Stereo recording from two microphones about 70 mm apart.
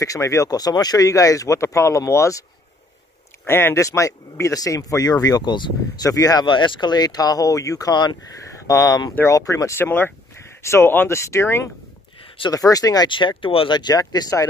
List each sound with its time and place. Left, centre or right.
0.0 s speech: left
3.4 s speech: left
3.7 s speech: left
6.0 s speech: left
7.9 s speech: left
8.6 s speech: left
9.8 s speech: left
12.4 s speech: left